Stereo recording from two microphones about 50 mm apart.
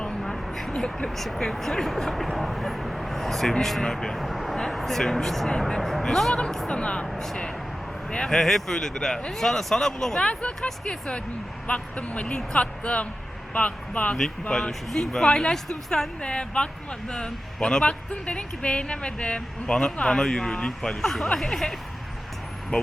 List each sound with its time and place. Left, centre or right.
0.0 s a sound: centre
0.8 s speech: centre
1.1 s speech: centre
6.7 s speech: left
8.1 s speech: centre
10.2 s speech: left
14.5 s speech: centre